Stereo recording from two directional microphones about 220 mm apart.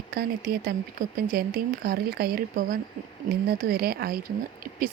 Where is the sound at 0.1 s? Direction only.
45° right (ahead or behind).